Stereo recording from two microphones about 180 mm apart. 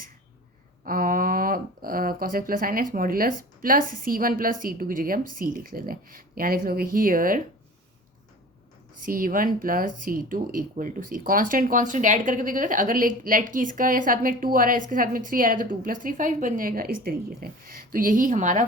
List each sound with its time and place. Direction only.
0.9 s speech: 50° right (ahead or behind)
9.0 s speech: 50° right (ahead or behind)